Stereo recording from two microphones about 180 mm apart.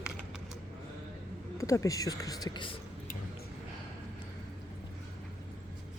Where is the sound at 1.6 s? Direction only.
15° left (ahead or behind).